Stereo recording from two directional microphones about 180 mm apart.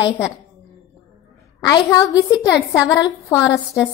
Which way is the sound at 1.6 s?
20° left (ahead or behind).